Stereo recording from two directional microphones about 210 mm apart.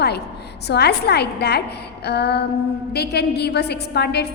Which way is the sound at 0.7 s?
50° left (ahead or behind).